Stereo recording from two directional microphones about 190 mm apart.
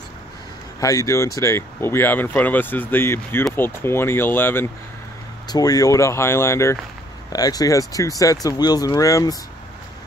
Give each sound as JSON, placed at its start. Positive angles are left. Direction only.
{"t": 0.7, "sound": "speech", "side_deg": 15}